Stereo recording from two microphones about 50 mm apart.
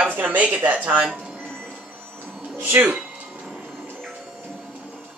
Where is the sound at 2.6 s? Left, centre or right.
Right.